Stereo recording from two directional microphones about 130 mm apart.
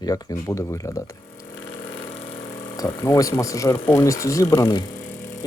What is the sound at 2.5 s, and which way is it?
Speech, 25° left (ahead or behind).